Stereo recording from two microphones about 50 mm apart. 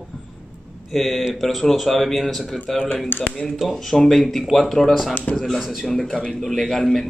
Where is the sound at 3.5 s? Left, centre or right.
Centre.